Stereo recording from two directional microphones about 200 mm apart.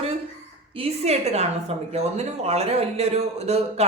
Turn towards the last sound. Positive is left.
turn(degrees=-30)  # may be behind; listen again after turning